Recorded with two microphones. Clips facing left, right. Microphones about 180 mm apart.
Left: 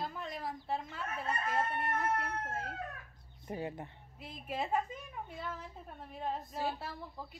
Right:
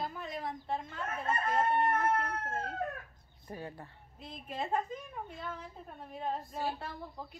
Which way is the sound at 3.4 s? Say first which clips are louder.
Left 4 dB; 20° left (ahead or behind).